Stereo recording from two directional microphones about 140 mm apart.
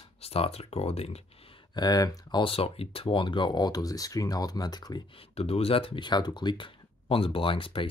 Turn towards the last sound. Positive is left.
turn(degrees=40)  # may be behind; listen again after turning